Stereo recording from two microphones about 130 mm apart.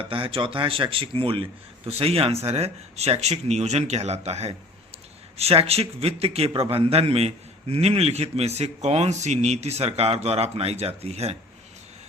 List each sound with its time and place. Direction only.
0.0 s a man's voice: 45° right (ahead or behind)